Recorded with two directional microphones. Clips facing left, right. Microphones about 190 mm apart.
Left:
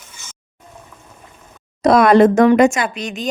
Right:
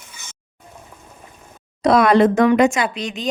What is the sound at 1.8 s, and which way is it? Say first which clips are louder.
Speech: left 3 dB; 45° left (ahead or behind).